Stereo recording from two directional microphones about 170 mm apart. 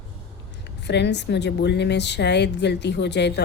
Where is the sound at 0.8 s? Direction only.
90° left.